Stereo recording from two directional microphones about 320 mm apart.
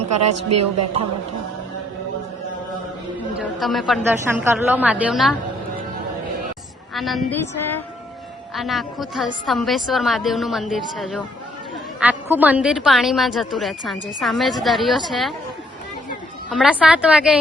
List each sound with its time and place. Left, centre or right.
0.4 s a woman's voice: right
3.3 s a woman's voice: centre
6.9 s a woman's voice: centre
8.5 s a woman's voice: centre
16.5 s a woman's voice: centre